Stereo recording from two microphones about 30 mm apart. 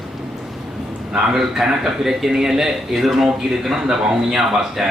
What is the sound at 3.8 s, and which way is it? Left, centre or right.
Speech, right.